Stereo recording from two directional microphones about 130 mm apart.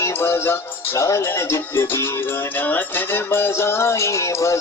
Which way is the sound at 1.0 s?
25° left (ahead or behind).